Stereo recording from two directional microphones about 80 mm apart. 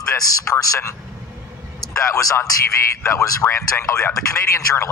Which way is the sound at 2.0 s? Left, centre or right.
Left.